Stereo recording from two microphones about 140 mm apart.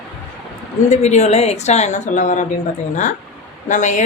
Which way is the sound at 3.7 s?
60° left (ahead or behind).